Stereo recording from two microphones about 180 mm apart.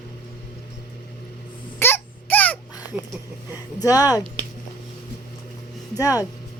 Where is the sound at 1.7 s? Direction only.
10° left (ahead or behind).